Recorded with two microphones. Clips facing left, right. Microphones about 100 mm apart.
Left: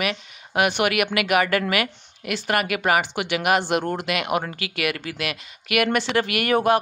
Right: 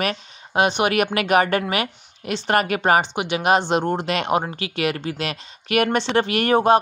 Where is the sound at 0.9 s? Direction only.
35° right (ahead or behind).